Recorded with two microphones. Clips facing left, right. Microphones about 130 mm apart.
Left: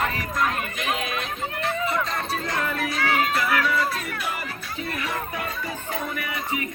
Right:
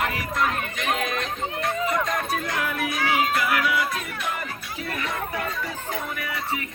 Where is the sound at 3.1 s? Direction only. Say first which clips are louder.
Even; 5° right (ahead or behind).